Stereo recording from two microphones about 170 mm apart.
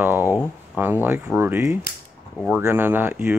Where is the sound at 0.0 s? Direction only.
10° right (ahead or behind).